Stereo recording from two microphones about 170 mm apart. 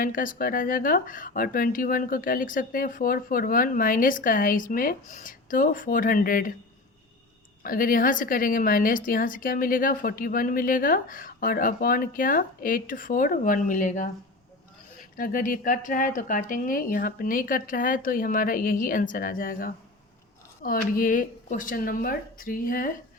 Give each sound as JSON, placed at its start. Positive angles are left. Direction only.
{"t": 0.0, "sound": "a woman's voice", "side_deg": 55}
{"t": 7.6, "sound": "a woman's voice", "side_deg": 55}
{"t": 15.2, "sound": "a woman's voice", "side_deg": 55}